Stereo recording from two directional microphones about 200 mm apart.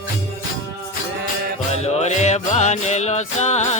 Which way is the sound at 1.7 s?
35° left (ahead or behind).